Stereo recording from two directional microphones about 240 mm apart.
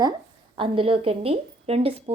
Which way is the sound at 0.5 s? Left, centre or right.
Right.